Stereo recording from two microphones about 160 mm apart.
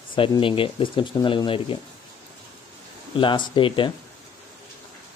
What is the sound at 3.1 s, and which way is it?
Speech, 30° left (ahead or behind).